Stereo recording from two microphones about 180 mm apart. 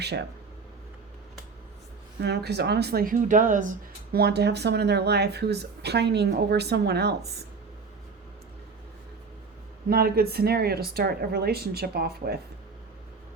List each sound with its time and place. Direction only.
2.2 s speech: 65° right (ahead or behind)
9.9 s speech: 60° right (ahead or behind)